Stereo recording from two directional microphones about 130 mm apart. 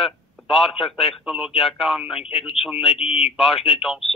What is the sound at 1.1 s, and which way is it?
Speech, 5° right (ahead or behind).